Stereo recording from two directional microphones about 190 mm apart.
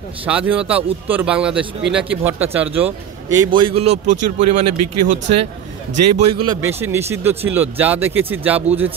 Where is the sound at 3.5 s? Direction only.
30° right (ahead or behind).